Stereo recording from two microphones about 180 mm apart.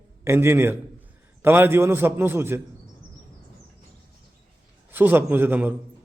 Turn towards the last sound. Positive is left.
turn(degrees=-10)  # may be behind; listen again after turning